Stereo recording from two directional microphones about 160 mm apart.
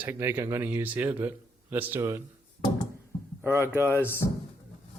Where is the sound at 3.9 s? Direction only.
15° left (ahead or behind).